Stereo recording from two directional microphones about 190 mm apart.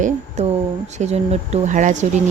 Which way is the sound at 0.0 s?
35° right (ahead or behind).